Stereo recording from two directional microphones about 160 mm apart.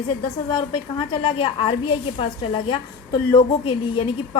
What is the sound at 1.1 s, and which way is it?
A woman's voice, 35° left (ahead or behind).